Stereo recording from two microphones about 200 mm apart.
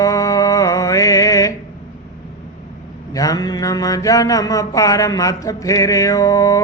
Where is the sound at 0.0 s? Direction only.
15° left (ahead or behind).